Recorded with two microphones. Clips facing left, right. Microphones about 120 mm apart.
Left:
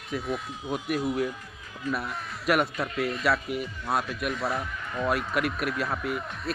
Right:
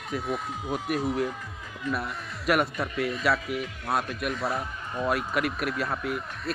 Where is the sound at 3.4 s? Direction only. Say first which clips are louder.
Even; 70° right (ahead or behind).